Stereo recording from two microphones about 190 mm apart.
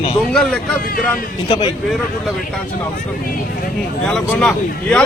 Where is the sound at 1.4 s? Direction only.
20° left (ahead or behind).